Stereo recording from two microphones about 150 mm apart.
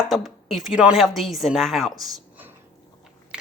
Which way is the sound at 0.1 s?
Centre (ahead or behind).